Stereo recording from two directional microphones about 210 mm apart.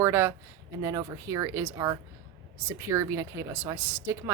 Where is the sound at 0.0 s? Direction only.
10° right (ahead or behind).